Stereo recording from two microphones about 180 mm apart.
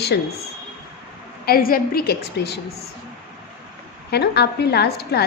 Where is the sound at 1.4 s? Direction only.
55° left (ahead or behind).